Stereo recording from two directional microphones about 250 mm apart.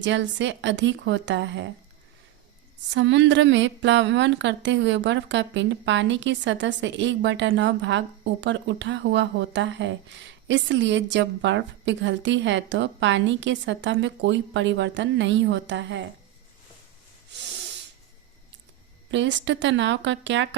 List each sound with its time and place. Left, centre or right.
0.0 s speech: right
2.9 s speech: right
19.1 s speech: right